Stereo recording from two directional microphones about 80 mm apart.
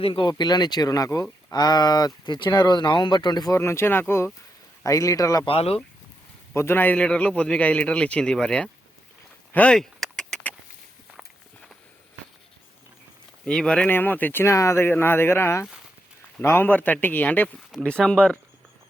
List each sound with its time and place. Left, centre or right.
0.1 s speech: left
1.5 s speech: left
3.5 s speech: left
4.8 s a man's voice: left
6.5 s a man's voice: left
9.7 s a sound: centre
13.4 s speech: centre
13.8 s speech: left
14.4 s a man's voice: left; by 18.2 s centre